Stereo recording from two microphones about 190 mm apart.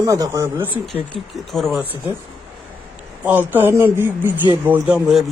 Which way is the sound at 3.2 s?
10° right (ahead or behind).